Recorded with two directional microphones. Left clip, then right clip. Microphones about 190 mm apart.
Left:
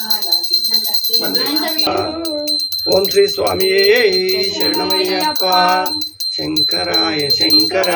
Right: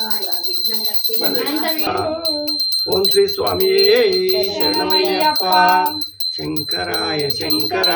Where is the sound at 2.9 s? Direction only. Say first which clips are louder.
Left 4 dB; centre (ahead or behind).